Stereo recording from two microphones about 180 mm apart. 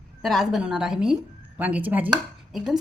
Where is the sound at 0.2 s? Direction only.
Centre (ahead or behind).